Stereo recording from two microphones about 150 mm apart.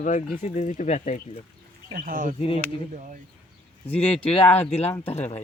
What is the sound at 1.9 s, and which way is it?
Speech, 65° right (ahead or behind).